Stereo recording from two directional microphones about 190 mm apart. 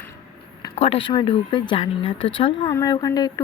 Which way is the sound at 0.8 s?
30° left (ahead or behind).